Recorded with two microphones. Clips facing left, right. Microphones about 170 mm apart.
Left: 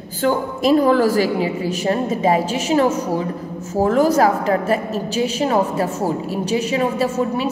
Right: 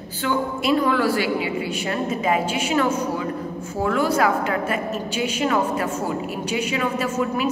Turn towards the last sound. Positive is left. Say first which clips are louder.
# left 3 dB
turn(degrees=35)  # may be behind; listen again after turning